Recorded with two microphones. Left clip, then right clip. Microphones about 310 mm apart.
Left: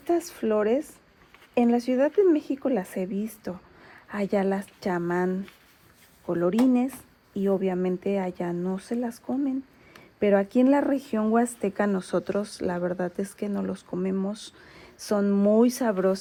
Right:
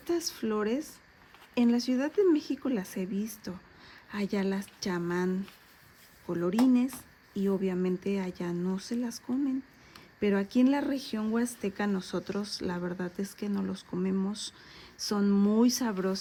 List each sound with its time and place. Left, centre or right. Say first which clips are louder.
0.1 s speech: left 7 dB; centre